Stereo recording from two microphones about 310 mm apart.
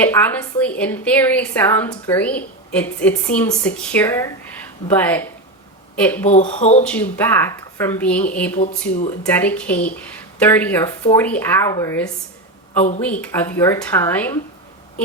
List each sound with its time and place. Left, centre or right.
0.0 s a woman's voice: centre
6.2 s speech: left
6.8 s a woman's voice: centre